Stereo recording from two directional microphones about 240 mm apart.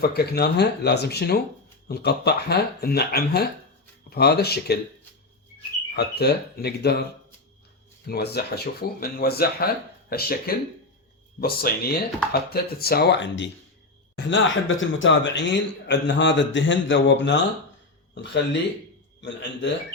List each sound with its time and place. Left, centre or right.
0.0 s a man's voice: left
5.9 s a man's voice: left
8.0 s a man's voice: left